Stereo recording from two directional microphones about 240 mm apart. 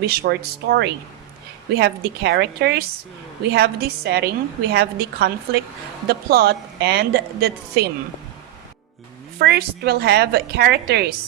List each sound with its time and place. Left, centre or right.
0.0 s a woman's voice: right
9.4 s a woman's voice: right